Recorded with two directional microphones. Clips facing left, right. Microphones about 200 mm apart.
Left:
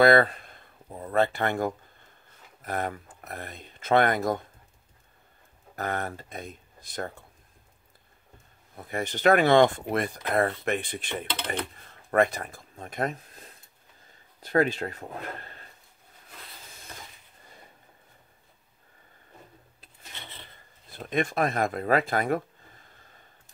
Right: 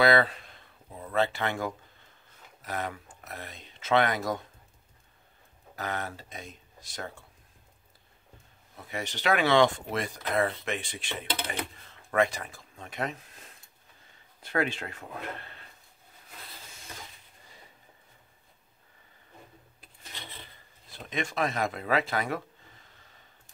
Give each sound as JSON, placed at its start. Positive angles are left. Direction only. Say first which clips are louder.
{"t": 0.0, "sound": "a sound", "louder": "left 4 dB", "side_deg": 50}
{"t": 2.6, "sound": "speech", "louder": "left 4 dB", "side_deg": 50}
{"t": 5.8, "sound": "speech", "louder": "left 3 dB", "side_deg": 55}
{"t": 8.7, "sound": "speech", "louder": "left 5 dB", "side_deg": 50}
{"t": 20.9, "sound": "speech", "louder": "left 6 dB", "side_deg": 55}